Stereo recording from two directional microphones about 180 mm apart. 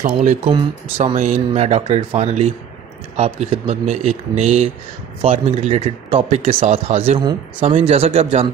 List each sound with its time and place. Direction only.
0.0 s speech: 45° right (ahead or behind)
0.5 s speech: 30° right (ahead or behind)